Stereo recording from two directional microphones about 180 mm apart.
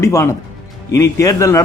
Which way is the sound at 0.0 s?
15° left (ahead or behind).